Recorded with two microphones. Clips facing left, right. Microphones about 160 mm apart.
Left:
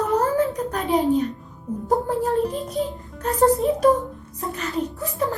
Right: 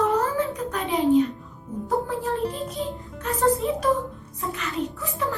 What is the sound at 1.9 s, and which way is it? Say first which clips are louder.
Music: left 4 dB; 40° left (ahead or behind).